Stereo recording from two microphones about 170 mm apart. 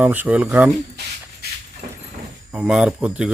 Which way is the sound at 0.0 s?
10° right (ahead or behind).